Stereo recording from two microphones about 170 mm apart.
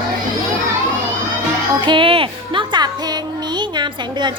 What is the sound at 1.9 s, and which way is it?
Music, 30° right (ahead or behind).